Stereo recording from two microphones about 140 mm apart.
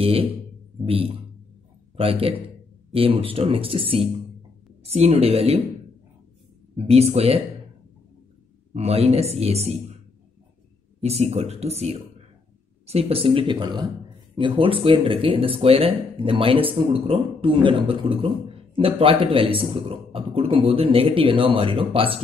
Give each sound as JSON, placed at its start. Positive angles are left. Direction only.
{"t": 0.0, "sound": "speech", "side_deg": -40}
{"t": 6.9, "sound": "speech", "side_deg": -45}
{"t": 8.7, "sound": "speech", "side_deg": -45}
{"t": 11.0, "sound": "speech", "side_deg": -50}